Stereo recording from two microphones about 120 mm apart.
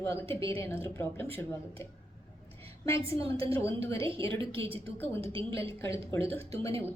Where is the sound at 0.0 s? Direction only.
20° left (ahead or behind).